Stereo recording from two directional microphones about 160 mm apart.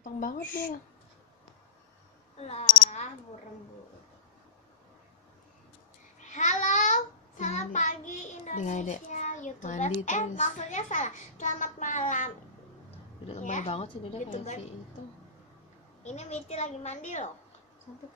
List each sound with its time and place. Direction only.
0.0 s speech: 60° left (ahead or behind)
2.3 s cricket: 40° left (ahead or behind)
6.2 s child singing: 50° left (ahead or behind)
10.0 s a child's voice: 50° left (ahead or behind)
13.3 s a child's voice: 50° left (ahead or behind)
16.0 s a child's voice: 45° left (ahead or behind)